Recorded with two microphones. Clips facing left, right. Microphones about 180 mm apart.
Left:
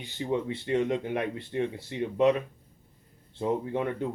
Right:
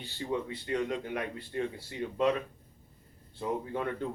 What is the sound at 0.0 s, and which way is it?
Speech, 20° left (ahead or behind).